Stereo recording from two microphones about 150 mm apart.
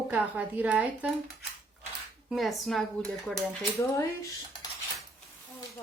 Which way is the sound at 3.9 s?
20° left (ahead or behind).